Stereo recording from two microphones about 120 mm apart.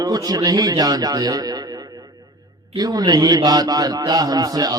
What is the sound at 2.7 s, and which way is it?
A man's voice, 30° right (ahead or behind).